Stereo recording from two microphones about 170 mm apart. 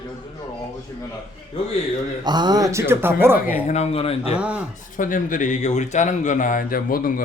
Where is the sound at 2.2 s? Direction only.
25° right (ahead or behind).